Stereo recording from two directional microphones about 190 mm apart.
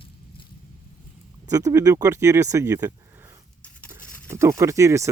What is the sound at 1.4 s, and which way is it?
Speech, 20° right (ahead or behind).